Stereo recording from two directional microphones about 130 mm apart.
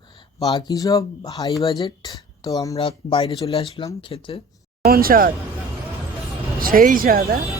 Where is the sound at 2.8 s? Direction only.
45° left (ahead or behind).